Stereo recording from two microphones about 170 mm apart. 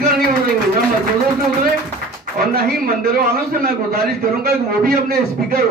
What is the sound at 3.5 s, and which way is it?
A man's voice, 60° right (ahead or behind).